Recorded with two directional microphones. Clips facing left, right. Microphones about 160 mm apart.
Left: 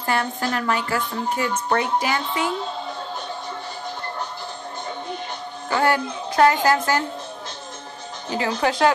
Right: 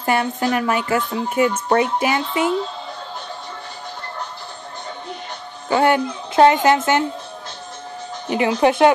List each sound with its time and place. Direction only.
0.0 s speech: 15° right (ahead or behind)
5.7 s a woman's voice: 20° right (ahead or behind)
8.3 s speech: 20° right (ahead or behind)